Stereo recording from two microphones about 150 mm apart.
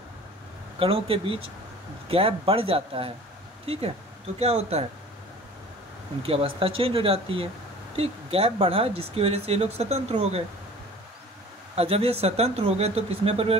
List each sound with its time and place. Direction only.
0.7 s speech: 40° right (ahead or behind)
6.2 s speech: 40° right (ahead or behind)
11.7 s speech: 40° right (ahead or behind)